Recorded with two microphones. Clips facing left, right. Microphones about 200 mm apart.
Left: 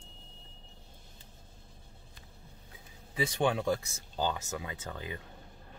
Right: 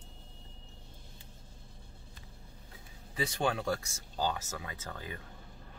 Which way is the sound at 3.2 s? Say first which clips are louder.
Left 3 dB; 20° left (ahead or behind).